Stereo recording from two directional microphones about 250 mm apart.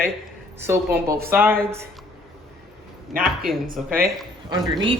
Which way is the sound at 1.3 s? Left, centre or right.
Centre.